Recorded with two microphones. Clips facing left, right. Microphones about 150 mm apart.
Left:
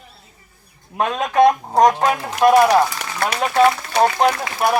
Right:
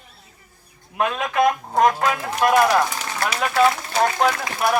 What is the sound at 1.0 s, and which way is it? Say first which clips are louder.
Speech: left 5 dB; 40° left (ahead or behind).